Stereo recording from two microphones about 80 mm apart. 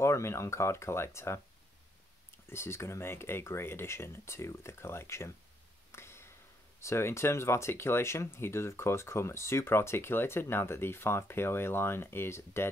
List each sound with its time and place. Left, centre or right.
0.0 s speech: left
2.5 s speech: left
5.9 s a sound: left
6.8 s speech: left